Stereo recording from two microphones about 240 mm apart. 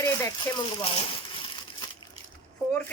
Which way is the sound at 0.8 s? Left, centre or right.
Left.